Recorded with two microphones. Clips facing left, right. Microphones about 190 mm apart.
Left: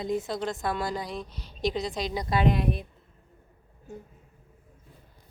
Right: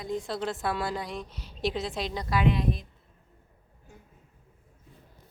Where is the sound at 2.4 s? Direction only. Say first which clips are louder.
Left 1 dB; 55° left (ahead or behind).